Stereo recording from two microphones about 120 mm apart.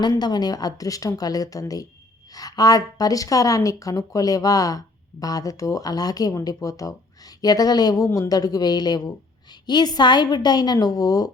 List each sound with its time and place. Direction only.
0.0 s a woman's voice: 35° left (ahead or behind)